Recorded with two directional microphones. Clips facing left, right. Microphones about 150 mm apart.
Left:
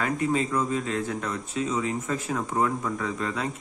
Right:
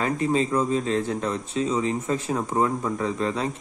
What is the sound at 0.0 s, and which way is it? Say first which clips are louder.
A man's voice: right 2 dB; 30° right (ahead or behind).